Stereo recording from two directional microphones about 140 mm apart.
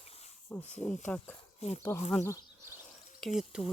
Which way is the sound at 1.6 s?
50° left (ahead or behind).